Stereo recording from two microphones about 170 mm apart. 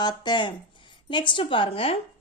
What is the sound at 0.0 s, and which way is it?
A woman's voice, 25° left (ahead or behind).